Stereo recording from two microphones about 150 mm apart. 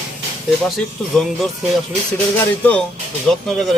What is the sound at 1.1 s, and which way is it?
Speech, centre (ahead or behind).